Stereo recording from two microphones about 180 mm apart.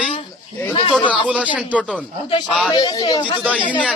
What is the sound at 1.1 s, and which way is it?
Speech, 5° right (ahead or behind).